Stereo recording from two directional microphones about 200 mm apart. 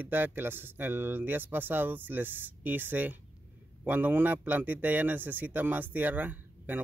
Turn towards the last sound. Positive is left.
turn(degrees=-10)  # may be behind; listen again after turning